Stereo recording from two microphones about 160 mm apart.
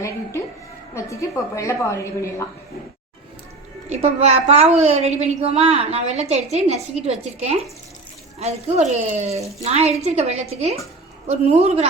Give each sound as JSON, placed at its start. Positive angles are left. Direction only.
{"t": 0.9, "sound": "a woman's voice", "side_deg": 20}
{"t": 3.8, "sound": "a woman's voice", "side_deg": -40}